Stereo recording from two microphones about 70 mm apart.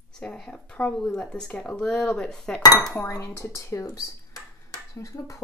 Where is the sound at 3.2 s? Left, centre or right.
Left.